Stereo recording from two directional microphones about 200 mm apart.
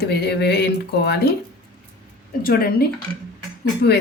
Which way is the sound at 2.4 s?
45° left (ahead or behind).